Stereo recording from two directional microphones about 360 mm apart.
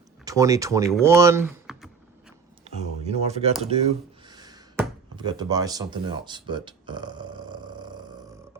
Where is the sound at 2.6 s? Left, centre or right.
Centre.